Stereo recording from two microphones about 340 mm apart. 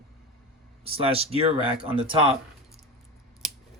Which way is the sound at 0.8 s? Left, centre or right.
Centre.